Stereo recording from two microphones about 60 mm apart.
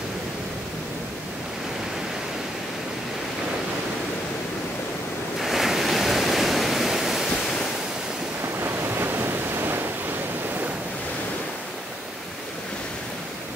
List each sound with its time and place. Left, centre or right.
5.4 s waves: centre
8.6 s waves: right